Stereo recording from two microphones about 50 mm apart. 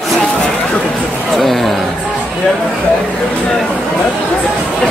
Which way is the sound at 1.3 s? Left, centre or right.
Centre.